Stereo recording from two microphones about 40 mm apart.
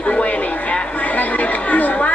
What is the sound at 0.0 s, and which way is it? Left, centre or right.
Chatter, left.